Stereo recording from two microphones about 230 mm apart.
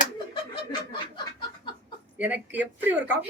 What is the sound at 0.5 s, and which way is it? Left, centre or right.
Chuckle, centre.